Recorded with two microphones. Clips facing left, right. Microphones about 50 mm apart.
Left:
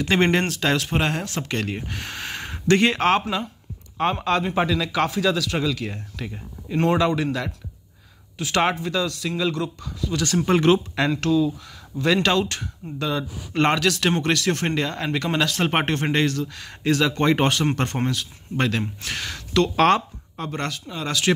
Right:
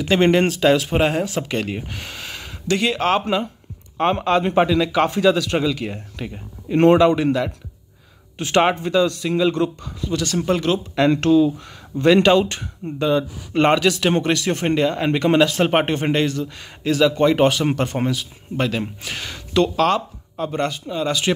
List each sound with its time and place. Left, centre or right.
0.2 s speech: centre
2.1 s a sound: left
3.1 s speech: centre
6.7 s speech: right
7.0 s speech: right
8.4 s speech: right
10.2 s speech: centre
10.5 s speech: left
11.1 s speech: right
12.1 s speech: centre
16.8 s speech: centre